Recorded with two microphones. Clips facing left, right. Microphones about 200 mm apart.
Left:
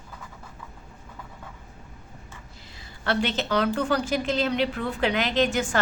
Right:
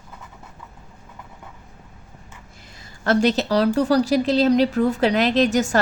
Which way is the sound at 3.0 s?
40° right (ahead or behind).